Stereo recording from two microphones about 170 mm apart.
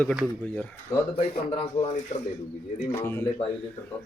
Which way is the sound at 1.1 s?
35° left (ahead or behind).